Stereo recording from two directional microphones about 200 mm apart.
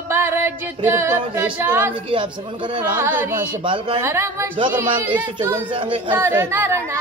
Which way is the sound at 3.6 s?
25° right (ahead or behind).